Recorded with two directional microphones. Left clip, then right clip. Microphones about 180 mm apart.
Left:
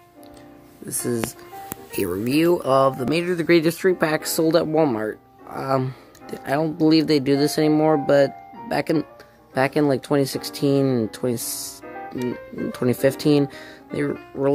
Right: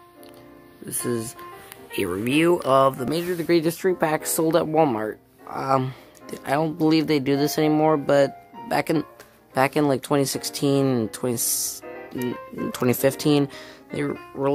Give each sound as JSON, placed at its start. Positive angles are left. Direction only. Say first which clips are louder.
{"t": 0.8, "sound": "speech", "louder": "left 2 dB", "side_deg": 0}
{"t": 11.8, "sound": "music", "louder": "left 2 dB", "side_deg": 50}
{"t": 12.3, "sound": "speech", "louder": "left 1 dB", "side_deg": 0}